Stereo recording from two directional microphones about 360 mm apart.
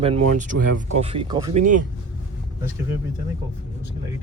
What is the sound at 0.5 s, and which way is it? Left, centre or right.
Speech, right.